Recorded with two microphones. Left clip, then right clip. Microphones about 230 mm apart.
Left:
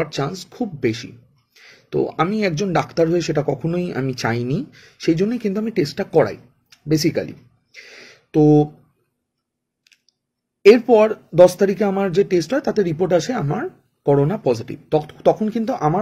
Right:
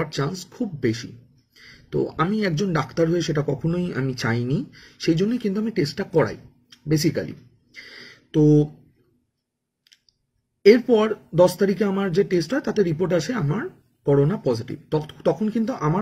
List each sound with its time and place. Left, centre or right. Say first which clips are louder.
0.1 s speech: left 3 dB; centre
2.1 s speech: left 4 dB; centre
7.7 s a sound: left 1 dB; left
11.0 s speech: left 6 dB; centre